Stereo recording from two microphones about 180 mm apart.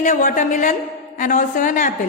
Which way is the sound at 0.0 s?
45° left (ahead or behind).